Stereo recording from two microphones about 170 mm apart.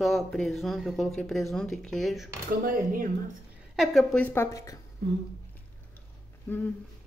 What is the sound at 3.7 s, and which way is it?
Speech, centre (ahead or behind).